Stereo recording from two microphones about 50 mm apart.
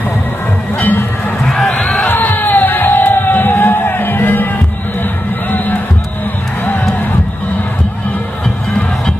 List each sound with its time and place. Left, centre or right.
0.7 s music: left
1.4 s run: centre
2.0 s music: left